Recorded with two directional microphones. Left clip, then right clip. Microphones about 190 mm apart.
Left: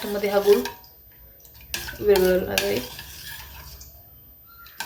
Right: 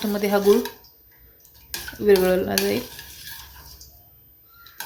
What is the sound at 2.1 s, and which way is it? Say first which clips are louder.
Speech: right 1 dB; 50° right (ahead or behind).